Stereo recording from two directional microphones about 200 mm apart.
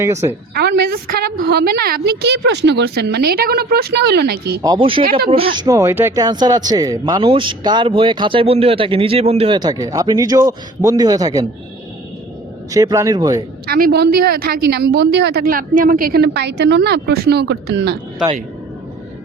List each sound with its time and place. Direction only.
0.0 s a man's voice: 15° right (ahead or behind)
0.5 s a woman's voice: 55° right (ahead or behind)
4.6 s speech: 25° right (ahead or behind)
12.7 s a man's voice: 15° right (ahead or behind)
13.7 s a woman's voice: 50° right (ahead or behind)